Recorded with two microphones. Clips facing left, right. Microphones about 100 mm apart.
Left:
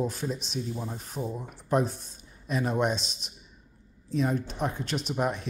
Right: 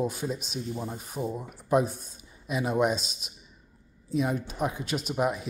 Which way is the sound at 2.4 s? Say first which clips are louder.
Right 1 dB; 5° right (ahead or behind).